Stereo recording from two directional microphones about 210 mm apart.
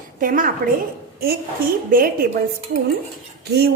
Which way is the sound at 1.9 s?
45° right (ahead or behind).